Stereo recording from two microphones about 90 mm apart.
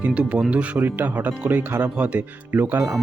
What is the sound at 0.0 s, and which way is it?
Speech, 15° right (ahead or behind).